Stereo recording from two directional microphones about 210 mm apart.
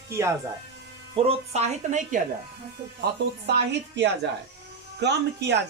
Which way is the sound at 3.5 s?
50° right (ahead or behind).